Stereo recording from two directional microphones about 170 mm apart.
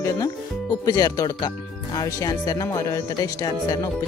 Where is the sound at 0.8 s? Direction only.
20° left (ahead or behind).